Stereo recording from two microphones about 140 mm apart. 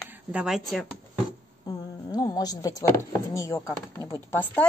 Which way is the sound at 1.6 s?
25° left (ahead or behind).